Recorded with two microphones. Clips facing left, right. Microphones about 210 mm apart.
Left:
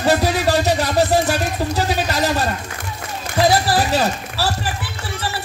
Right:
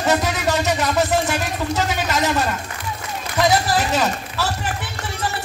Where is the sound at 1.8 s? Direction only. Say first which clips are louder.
Left 2 dB; 35° left (ahead or behind).